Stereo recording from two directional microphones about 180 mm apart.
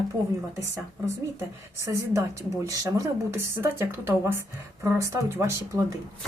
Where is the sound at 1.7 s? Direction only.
15° right (ahead or behind).